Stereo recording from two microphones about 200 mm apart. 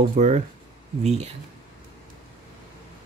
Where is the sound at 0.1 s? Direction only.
35° right (ahead or behind).